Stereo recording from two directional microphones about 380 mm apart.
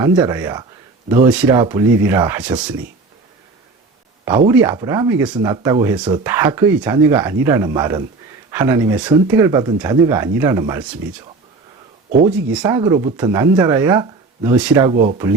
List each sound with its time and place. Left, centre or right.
0.0 s speech: centre
4.3 s speech: centre
12.5 s speech: centre
14.8 s speech: centre